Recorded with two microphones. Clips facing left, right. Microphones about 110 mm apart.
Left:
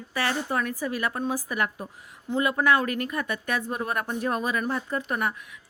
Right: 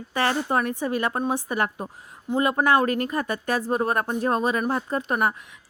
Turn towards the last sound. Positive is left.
turn(degrees=-30)  # may be behind; listen again after turning